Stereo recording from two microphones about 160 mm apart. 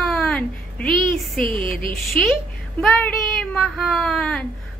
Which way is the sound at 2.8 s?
Centre (ahead or behind).